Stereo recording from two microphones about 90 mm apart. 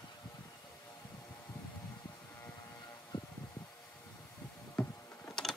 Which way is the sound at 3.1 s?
55° left (ahead or behind).